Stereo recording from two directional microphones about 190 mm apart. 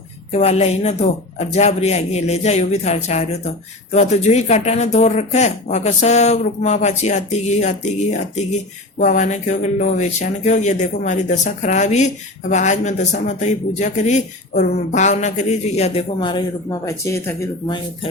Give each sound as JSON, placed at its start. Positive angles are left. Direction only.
{"t": 0.3, "sound": "speech", "side_deg": 35}